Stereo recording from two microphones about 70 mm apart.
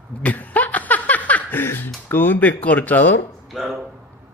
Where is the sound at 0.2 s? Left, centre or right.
Left.